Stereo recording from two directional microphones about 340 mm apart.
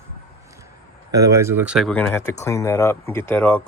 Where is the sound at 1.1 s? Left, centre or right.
Centre.